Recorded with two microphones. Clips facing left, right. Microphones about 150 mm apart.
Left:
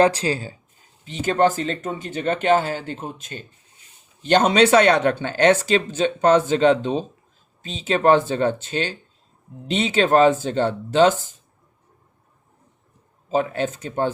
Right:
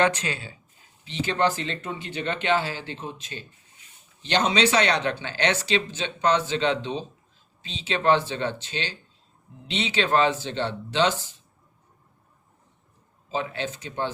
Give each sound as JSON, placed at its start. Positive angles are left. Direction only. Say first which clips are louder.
{"t": 0.0, "sound": "speech", "louder": "left 6 dB", "side_deg": 35}
{"t": 13.2, "sound": "speech", "louder": "left 7 dB", "side_deg": 45}